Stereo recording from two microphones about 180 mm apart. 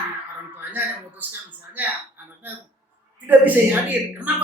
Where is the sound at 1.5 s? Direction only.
10° right (ahead or behind).